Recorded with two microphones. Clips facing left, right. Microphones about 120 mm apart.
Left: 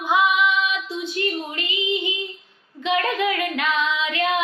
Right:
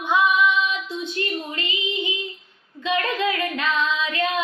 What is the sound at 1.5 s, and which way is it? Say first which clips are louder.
Female singing: left 2 dB; 20° left (ahead or behind).